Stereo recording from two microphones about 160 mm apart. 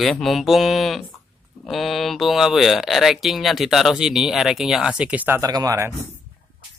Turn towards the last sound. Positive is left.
turn(degrees=-20)  # may be behind; listen again after turning